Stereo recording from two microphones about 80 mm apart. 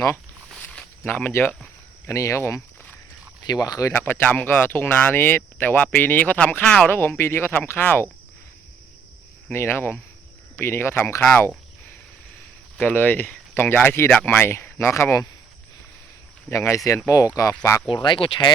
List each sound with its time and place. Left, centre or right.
0.6 s walk: centre
1.0 s speech: left
2.0 s speech: left
3.4 s speech: left
3.9 s speech: left
6.9 s speech: left
9.5 s speech: left
12.8 s speech: left
16.5 s speech: left
17.8 s speech: left